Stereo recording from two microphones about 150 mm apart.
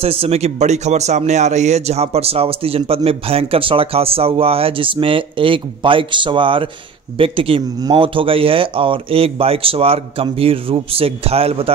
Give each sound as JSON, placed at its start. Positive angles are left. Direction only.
{"t": 0.0, "sound": "speech", "side_deg": -40}